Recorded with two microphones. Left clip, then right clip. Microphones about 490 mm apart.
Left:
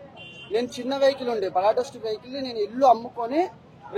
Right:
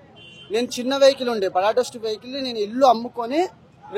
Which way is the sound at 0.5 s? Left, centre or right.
Right.